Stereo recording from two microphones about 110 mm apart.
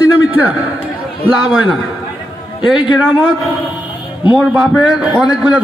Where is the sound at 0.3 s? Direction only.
15° right (ahead or behind).